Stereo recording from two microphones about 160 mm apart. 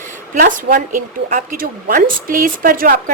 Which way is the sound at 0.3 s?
55° right (ahead or behind).